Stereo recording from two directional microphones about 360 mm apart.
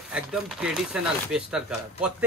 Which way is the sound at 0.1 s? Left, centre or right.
Centre.